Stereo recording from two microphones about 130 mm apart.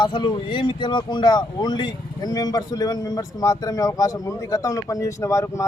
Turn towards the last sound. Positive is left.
turn(degrees=25)  # may be behind; listen again after turning